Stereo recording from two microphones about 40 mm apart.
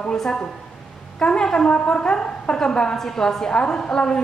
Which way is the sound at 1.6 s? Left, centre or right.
Left.